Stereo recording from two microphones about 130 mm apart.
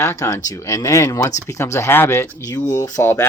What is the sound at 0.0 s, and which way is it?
Speech, 25° left (ahead or behind).